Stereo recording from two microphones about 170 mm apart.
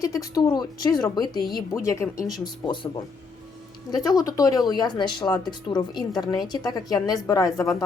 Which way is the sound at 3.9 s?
25° left (ahead or behind).